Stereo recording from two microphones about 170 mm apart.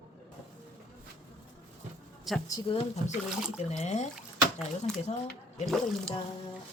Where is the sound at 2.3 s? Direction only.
Centre (ahead or behind).